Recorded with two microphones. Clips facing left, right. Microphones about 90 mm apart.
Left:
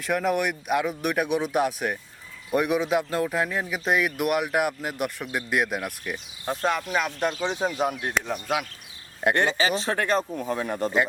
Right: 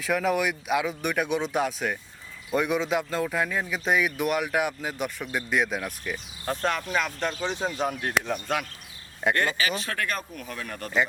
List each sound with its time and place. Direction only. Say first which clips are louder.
0.0 s speech: even; centre (ahead or behind)
9.3 s speech: left 3 dB; 20° left (ahead or behind)